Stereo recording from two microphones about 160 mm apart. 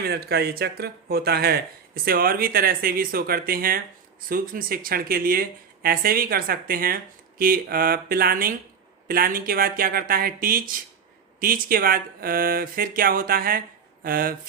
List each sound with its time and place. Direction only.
0.0 s speech: 80° right; by 14.3 s 65° right (ahead or behind)